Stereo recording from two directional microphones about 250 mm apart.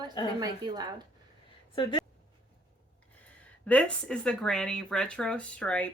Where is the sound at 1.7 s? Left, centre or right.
Centre.